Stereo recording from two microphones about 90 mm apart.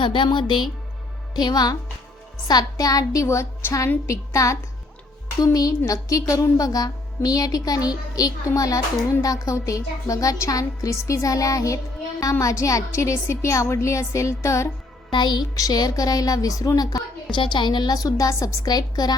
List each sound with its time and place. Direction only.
0.0 s speech: 65° left (ahead or behind); by 14.7 s 35° left (ahead or behind)
15.1 s speech: 55° left (ahead or behind)
15.5 s speech: 40° left (ahead or behind)
17.3 s speech: 60° left (ahead or behind)